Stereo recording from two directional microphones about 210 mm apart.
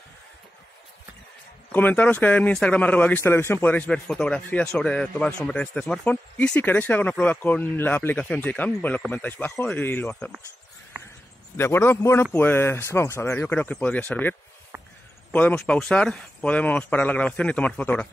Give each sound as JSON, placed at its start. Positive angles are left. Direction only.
{"t": 1.7, "sound": "speech", "side_deg": 10}
{"t": 10.9, "sound": "a sound", "side_deg": -10}
{"t": 11.5, "sound": "speech", "side_deg": 10}
{"t": 15.3, "sound": "speech", "side_deg": 5}